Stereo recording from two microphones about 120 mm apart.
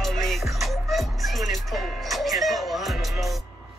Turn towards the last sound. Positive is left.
turn(degrees=0)  # may be behind; listen again after turning